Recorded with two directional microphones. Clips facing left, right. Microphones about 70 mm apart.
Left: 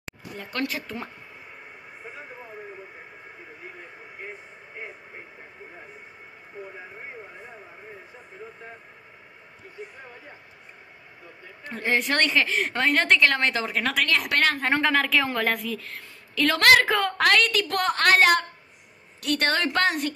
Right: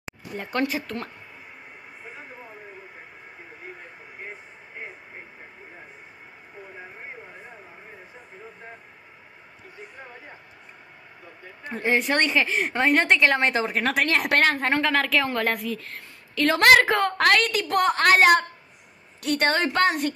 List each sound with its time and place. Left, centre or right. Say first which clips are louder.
0.5 s a woman's voice: right 4 dB; right
0.8 s speech: right 2 dB; centre
11.6 s a woman's voice: right 2 dB; centre; by 14.4 s right
14.6 s a woman's voice: even; centre
16.4 s a woman's voice: right 2 dB; centre
17.0 s a woman's voice: right 1 dB; centre